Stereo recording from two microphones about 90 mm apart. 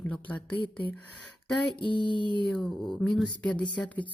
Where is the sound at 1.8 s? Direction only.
60° left (ahead or behind).